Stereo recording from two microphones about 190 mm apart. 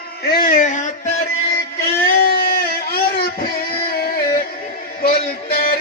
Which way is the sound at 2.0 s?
50° left (ahead or behind).